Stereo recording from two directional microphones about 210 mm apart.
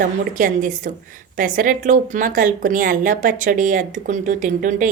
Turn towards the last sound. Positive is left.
turn(degrees=-35)  # may be behind; listen again after turning